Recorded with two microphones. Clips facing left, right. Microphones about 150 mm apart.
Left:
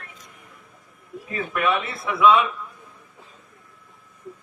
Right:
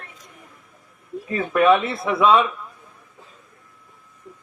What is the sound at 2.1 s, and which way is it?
Speech, 30° right (ahead or behind).